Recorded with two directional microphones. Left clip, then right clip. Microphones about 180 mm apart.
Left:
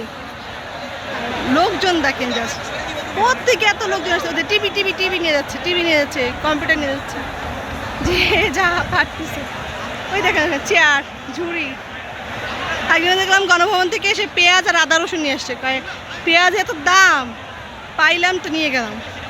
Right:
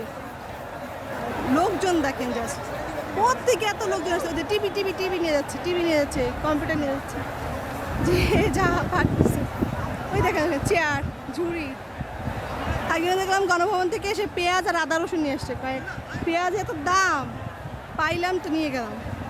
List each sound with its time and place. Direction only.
1.5 s speech: centre (ahead or behind)
8.0 s speech: 5° right (ahead or behind)
10.2 s speech: 10° right (ahead or behind)
12.9 s speech: 5° right (ahead or behind)
14.0 s speech: 25° right (ahead or behind)
16.2 s speech: 5° right (ahead or behind)